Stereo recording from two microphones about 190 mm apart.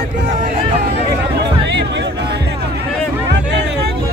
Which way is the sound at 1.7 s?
65° right (ahead or behind).